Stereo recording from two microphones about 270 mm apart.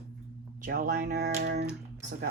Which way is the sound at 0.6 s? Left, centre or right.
Right.